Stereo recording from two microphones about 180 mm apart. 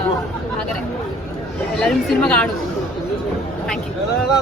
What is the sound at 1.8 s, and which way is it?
Speech, 5° left (ahead or behind).